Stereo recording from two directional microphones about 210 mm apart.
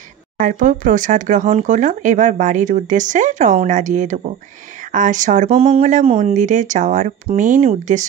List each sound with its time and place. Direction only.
0.4 s speech: 40° right (ahead or behind)